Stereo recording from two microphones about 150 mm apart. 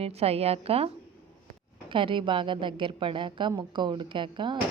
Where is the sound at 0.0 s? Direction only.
40° right (ahead or behind).